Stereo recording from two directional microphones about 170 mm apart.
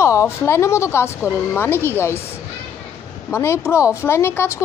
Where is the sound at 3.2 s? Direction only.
15° left (ahead or behind).